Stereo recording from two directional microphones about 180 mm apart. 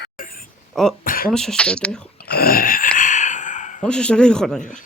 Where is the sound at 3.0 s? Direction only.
45° left (ahead or behind).